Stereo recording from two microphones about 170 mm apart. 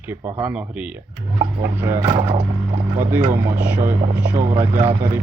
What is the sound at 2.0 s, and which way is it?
Speech, 25° right (ahead or behind).